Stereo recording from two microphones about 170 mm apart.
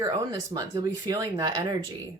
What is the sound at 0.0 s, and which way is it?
Speech, 20° right (ahead or behind).